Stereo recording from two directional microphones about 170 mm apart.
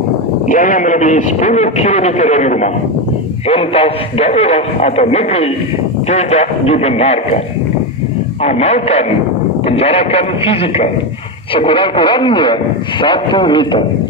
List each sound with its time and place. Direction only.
0.5 s a man's voice: 50° left (ahead or behind)
8.5 s speech: 40° left (ahead or behind)